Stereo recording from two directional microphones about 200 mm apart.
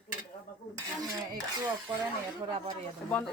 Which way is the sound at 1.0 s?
20° right (ahead or behind).